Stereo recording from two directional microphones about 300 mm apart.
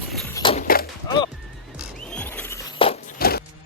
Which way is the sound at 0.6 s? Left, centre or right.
Left.